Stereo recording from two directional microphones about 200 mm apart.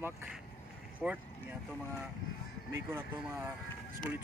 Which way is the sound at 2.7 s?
10° right (ahead or behind).